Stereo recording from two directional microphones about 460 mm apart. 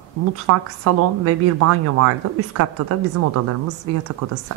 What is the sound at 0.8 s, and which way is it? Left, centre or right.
A woman's voice, right.